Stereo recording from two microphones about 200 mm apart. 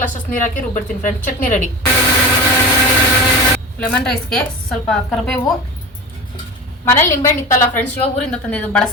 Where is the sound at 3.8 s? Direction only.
5° left (ahead or behind).